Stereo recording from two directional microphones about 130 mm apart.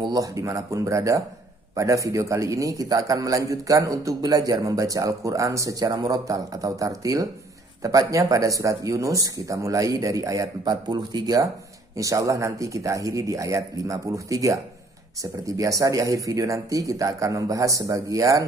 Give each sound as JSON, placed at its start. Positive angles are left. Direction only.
{"t": 0.0, "sound": "a man's voice", "side_deg": -30}